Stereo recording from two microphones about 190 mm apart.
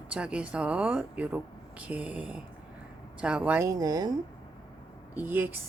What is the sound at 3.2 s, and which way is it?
Speech, 5° right (ahead or behind).